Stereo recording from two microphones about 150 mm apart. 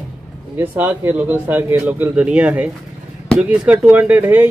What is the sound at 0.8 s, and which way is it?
A man's voice, 10° right (ahead or behind).